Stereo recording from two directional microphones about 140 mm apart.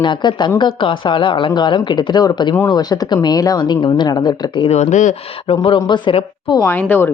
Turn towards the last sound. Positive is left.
turn(degrees=15)  # may be behind; listen again after turning